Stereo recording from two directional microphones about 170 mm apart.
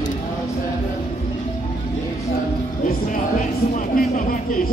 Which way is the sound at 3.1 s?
50° left (ahead or behind).